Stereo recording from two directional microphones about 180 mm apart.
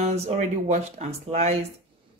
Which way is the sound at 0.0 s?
40° right (ahead or behind).